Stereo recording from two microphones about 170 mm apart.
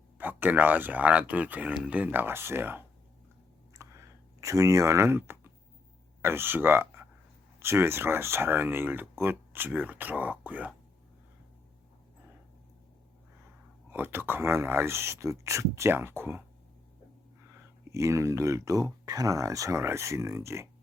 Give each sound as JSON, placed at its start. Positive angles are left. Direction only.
{"t": 0.2, "sound": "speech", "side_deg": -10}
{"t": 3.7, "sound": "clicking", "side_deg": -15}
{"t": 6.2, "sound": "speech", "side_deg": -15}
{"t": 13.9, "sound": "speech", "side_deg": -10}
{"t": 17.5, "sound": "speech", "side_deg": -15}